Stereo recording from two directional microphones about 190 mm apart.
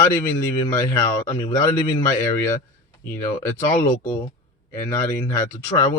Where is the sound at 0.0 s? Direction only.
15° left (ahead or behind).